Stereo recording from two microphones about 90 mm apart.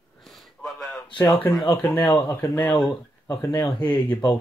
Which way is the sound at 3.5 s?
60° left (ahead or behind).